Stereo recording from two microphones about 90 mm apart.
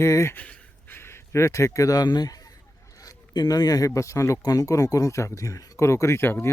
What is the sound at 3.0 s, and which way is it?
Speech, 45° left (ahead or behind).